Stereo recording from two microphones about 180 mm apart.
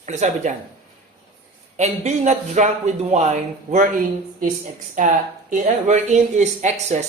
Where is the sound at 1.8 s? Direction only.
40° right (ahead or behind).